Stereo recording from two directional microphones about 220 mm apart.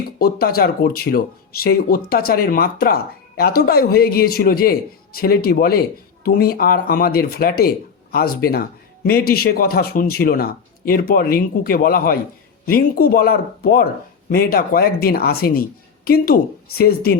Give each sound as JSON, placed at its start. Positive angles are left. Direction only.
{"t": 0.2, "sound": "speech", "side_deg": 40}